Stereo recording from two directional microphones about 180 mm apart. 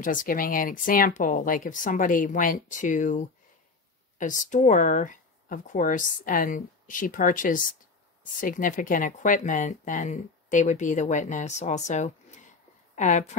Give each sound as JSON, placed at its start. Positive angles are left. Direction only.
{"t": 0.0, "sound": "speech", "side_deg": 50}